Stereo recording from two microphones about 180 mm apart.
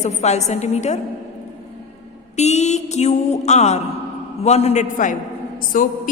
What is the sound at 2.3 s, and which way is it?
A woman's voice, 40° left (ahead or behind).